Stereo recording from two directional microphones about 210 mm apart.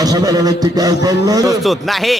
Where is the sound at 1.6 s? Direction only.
Centre (ahead or behind).